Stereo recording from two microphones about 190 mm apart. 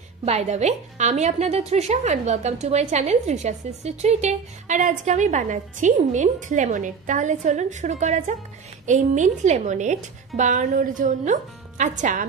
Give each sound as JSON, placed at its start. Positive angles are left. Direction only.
{"t": 0.2, "sound": "a woman's voice", "side_deg": -35}